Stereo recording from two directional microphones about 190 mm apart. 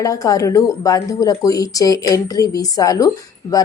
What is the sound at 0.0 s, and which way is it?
Speech, 20° left (ahead or behind).